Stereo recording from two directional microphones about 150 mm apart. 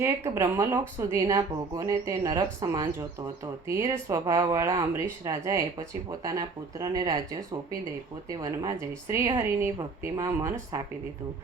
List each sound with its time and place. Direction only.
0.0 s speech: 20° right (ahead or behind)